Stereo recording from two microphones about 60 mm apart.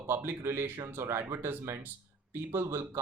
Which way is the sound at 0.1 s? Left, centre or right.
Right.